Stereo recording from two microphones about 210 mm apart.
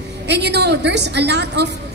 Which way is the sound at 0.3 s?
55° right (ahead or behind).